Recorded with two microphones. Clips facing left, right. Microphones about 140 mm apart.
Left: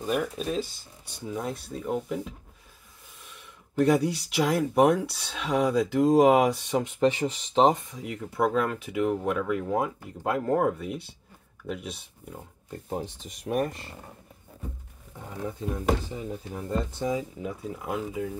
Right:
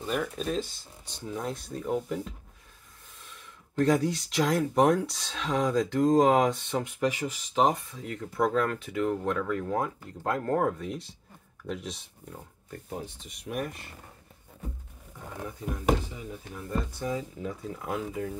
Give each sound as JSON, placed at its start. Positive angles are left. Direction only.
{"t": 0.0, "sound": "speech", "side_deg": 15}
{"t": 0.4, "sound": "speech", "side_deg": 5}
{"t": 3.7, "sound": "speech", "side_deg": 5}
{"t": 6.8, "sound": "speech", "side_deg": 25}
{"t": 8.0, "sound": "speech", "side_deg": 10}
{"t": 13.5, "sound": "speech", "side_deg": 35}
{"t": 15.4, "sound": "speech", "side_deg": 25}